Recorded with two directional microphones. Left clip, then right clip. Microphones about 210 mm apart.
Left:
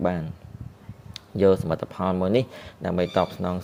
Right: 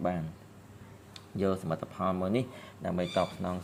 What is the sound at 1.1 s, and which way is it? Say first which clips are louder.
Speech: left 12 dB; 35° left (ahead or behind).